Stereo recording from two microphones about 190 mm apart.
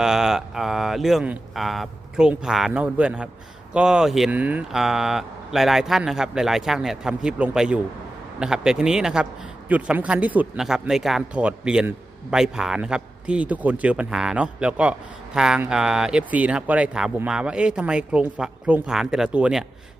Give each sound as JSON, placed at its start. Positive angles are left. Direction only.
{"t": 0.0, "sound": "speech", "side_deg": 0}